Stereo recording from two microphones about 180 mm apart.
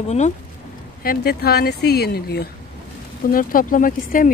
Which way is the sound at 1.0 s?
60° left (ahead or behind).